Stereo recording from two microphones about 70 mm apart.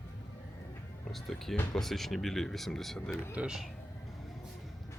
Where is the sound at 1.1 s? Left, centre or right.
Centre.